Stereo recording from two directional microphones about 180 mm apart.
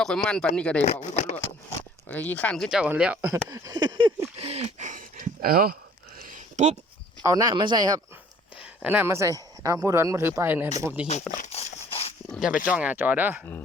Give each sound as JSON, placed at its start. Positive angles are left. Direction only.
{"t": 0.0, "sound": "speech", "side_deg": 5}
{"t": 1.0, "sound": "speech", "side_deg": 40}
{"t": 2.0, "sound": "speech", "side_deg": 10}
{"t": 3.5, "sound": "a sound", "side_deg": -20}
{"t": 6.2, "sound": "a sound", "side_deg": -40}
{"t": 7.2, "sound": "speech", "side_deg": -20}
{"t": 8.5, "sound": "speech", "side_deg": -5}
{"t": 11.3, "sound": "a sound", "side_deg": 35}
{"t": 12.3, "sound": "speech", "side_deg": -5}